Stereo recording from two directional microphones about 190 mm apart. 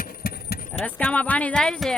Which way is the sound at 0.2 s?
50° left (ahead or behind).